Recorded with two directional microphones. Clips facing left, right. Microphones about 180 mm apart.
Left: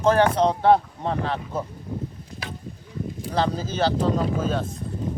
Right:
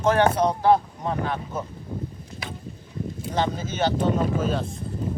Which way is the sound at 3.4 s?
35° left (ahead or behind).